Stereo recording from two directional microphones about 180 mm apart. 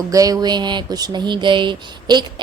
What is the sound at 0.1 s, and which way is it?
Speech, 20° right (ahead or behind).